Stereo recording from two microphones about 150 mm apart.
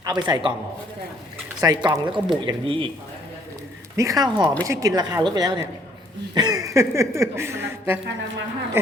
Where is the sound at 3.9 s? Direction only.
25° right (ahead or behind).